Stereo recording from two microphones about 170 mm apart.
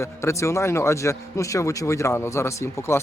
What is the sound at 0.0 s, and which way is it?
Speech, 15° left (ahead or behind).